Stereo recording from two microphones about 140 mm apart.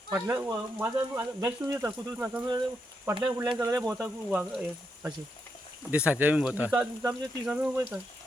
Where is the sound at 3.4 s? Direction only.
25° right (ahead or behind).